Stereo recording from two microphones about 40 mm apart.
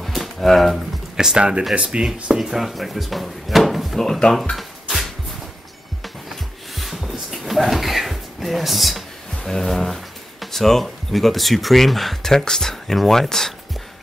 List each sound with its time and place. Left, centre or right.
0.0 s a sound: centre
1.1 s speech: centre
2.3 s speech: centre
4.0 s speech: centre
4.6 s music: centre
6.8 s a sound: centre
9.4 s speech: centre
12.2 s speech: centre